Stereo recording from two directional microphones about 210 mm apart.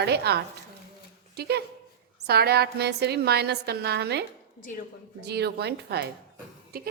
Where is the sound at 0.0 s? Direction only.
50° right (ahead or behind).